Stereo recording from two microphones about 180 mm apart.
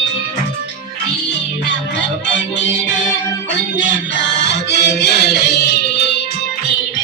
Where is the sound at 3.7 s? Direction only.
85° left.